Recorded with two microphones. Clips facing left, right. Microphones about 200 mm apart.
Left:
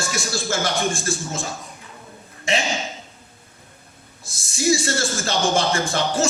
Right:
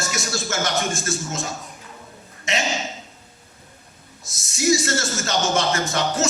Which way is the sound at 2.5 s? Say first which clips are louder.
Left 3 dB; 30° left (ahead or behind).